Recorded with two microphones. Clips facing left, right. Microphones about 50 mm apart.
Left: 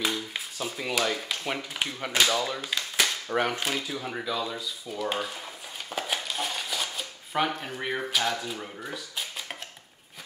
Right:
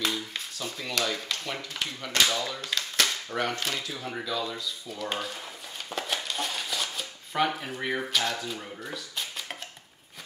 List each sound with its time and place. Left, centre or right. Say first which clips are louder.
0.3 s a sound: left 2 dB; centre
1.1 s speech: left 2 dB; centre
5.9 s shuffling cards: left 1 dB; centre